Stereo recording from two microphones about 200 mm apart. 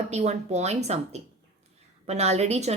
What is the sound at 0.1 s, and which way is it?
A woman's voice, 35° right (ahead or behind).